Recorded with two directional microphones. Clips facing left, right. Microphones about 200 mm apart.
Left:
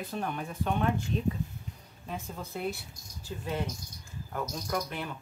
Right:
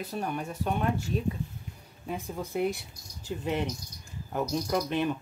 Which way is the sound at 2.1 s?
15° right (ahead or behind).